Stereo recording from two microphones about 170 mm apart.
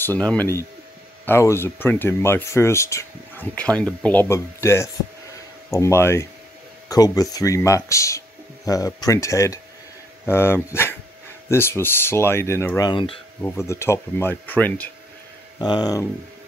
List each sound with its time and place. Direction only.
0.0 s speech: 10° left (ahead or behind); by 13.2 s 30° left (ahead or behind)
13.7 s speech: 15° left (ahead or behind)
15.6 s speech: 25° left (ahead or behind)